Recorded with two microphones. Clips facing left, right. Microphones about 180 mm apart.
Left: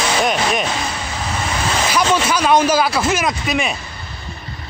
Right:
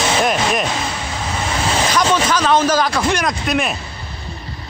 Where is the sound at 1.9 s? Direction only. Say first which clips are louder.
Left 1 dB; 10° left (ahead or behind).